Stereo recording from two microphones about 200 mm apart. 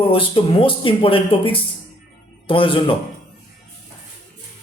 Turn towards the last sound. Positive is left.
turn(degrees=25)  # may be behind; listen again after turning